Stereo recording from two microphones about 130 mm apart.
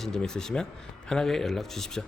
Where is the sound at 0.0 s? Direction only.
5° left (ahead or behind).